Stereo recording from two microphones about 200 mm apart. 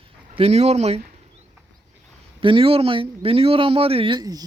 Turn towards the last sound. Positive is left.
turn(degrees=-20)  # may be behind; listen again after turning